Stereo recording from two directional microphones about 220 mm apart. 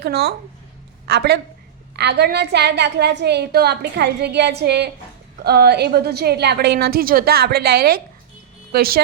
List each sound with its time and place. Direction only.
0.0 s a woman's voice: 45° right (ahead or behind)